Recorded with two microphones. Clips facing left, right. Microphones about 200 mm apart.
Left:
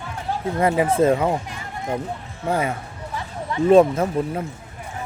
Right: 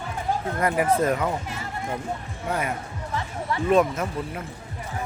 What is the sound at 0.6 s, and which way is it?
Speech, 25° left (ahead or behind).